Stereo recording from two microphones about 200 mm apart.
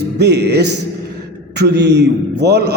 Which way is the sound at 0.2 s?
55° right (ahead or behind).